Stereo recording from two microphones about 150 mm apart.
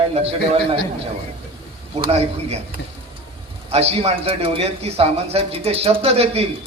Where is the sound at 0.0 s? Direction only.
40° right (ahead or behind).